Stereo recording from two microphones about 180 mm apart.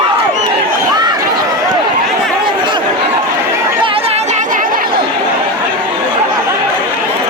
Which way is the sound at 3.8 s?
35° right (ahead or behind).